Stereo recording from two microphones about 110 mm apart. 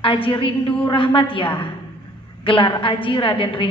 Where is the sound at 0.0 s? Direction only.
50° left (ahead or behind).